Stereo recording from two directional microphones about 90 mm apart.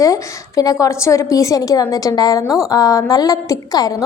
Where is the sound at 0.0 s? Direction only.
40° left (ahead or behind).